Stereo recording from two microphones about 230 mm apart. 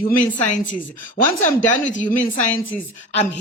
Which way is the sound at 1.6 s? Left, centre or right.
Left.